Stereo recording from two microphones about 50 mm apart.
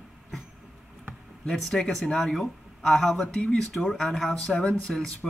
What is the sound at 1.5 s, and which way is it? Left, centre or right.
Speech, centre.